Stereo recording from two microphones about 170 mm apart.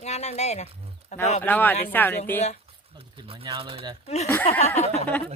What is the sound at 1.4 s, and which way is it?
Speech, 10° left (ahead or behind).